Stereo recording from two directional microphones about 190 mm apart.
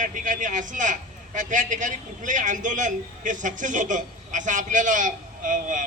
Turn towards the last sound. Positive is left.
turn(degrees=-45)  # may be behind; listen again after turning